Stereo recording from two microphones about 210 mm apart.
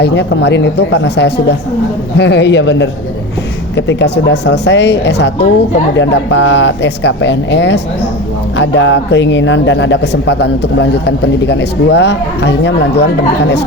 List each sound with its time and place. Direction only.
0.0 s a man's voice: 55° left (ahead or behind)